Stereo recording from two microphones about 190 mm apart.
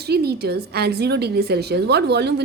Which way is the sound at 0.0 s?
55° right (ahead or behind).